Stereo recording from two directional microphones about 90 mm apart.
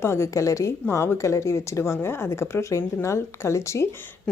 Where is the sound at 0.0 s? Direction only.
30° left (ahead or behind).